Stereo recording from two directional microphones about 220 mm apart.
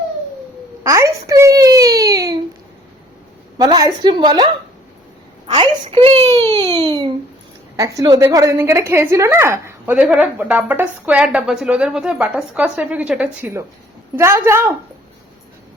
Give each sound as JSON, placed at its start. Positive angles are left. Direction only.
{"t": 0.9, "sound": "baby cry", "side_deg": -15}
{"t": 3.6, "sound": "a woman's voice", "side_deg": -15}
{"t": 5.5, "sound": "baby cry", "side_deg": -30}
{"t": 6.2, "sound": "baby cry", "side_deg": -15}
{"t": 7.8, "sound": "a woman's voice", "side_deg": -15}